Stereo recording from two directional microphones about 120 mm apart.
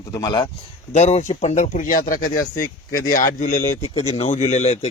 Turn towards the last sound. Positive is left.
turn(degrees=65)  # may be behind; listen again after turning